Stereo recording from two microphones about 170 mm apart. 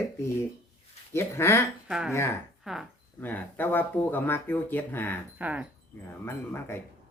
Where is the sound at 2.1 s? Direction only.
15° left (ahead or behind).